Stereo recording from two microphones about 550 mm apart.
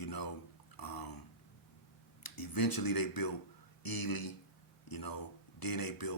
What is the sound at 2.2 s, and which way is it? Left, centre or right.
Speech, left.